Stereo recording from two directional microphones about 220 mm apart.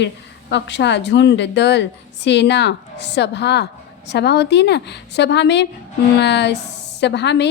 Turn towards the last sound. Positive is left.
turn(degrees=50)  # may be behind; listen again after turning